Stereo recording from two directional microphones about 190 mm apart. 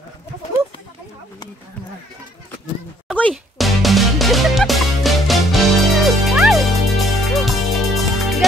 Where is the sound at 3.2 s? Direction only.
5° left (ahead or behind).